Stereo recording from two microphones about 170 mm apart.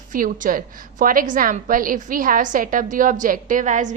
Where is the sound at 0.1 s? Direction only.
55° right (ahead or behind).